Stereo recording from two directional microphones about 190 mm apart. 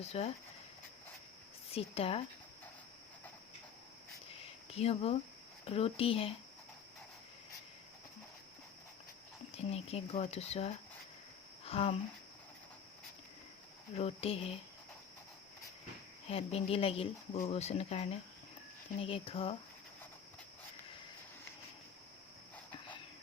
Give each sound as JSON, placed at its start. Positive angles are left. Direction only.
{"t": 0.0, "sound": "speech", "side_deg": 35}
{"t": 1.7, "sound": "speech", "side_deg": 30}
{"t": 4.7, "sound": "speech", "side_deg": 30}
{"t": 9.6, "sound": "speech", "side_deg": 35}
{"t": 13.9, "sound": "speech", "side_deg": 30}
{"t": 16.3, "sound": "speech", "side_deg": 30}